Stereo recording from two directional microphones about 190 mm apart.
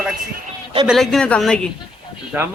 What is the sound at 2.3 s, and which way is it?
Speech, 10° right (ahead or behind).